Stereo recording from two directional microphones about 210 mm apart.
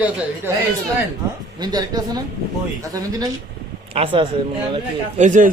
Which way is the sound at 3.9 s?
25° right (ahead or behind).